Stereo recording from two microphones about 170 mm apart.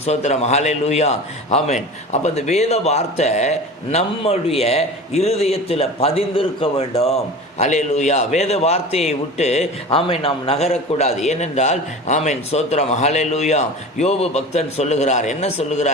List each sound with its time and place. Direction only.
0.0 s a man's voice: 40° left (ahead or behind)